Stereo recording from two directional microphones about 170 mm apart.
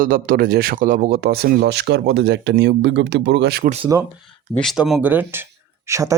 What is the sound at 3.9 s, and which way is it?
Speech, 20° right (ahead or behind).